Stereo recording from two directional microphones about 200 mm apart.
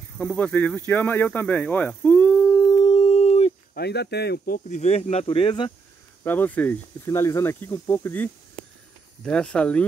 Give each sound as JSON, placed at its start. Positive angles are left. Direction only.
{"t": 0.2, "sound": "a sound", "side_deg": 5}
{"t": 3.7, "sound": "speech", "side_deg": 55}
{"t": 4.6, "sound": "speech", "side_deg": 35}
{"t": 6.2, "sound": "speech", "side_deg": 10}